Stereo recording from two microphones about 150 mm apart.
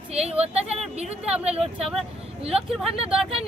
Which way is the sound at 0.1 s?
40° right (ahead or behind).